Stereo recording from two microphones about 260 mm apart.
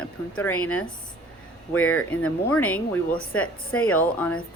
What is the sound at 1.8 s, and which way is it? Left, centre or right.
Speech, left.